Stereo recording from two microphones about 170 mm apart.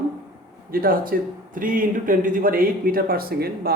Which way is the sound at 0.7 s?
60° right (ahead or behind).